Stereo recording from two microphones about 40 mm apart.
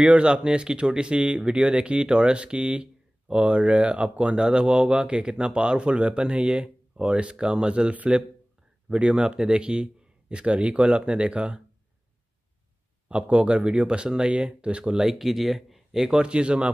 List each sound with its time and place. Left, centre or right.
0.0 s speech: right
13.1 s speech: right
15.0 s speech: centre
16.2 s speech: right